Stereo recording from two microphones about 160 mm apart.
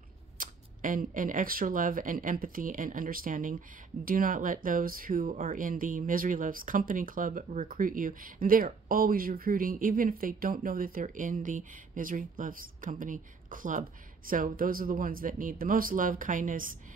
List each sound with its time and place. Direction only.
0.4 s speech: 55° right (ahead or behind)